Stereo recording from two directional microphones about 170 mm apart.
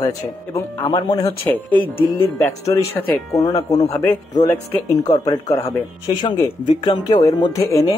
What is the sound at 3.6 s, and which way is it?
Speech, 40° left (ahead or behind).